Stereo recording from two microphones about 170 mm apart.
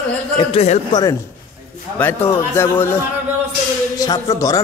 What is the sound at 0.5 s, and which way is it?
Speech, 35° left (ahead or behind).